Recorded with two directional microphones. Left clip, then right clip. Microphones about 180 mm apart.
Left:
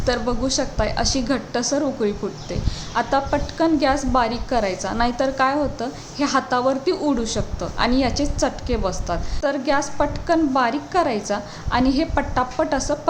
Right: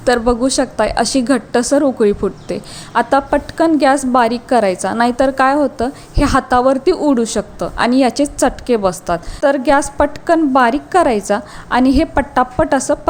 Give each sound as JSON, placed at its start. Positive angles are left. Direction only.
{"t": 0.0, "sound": "a woman's voice", "side_deg": -45}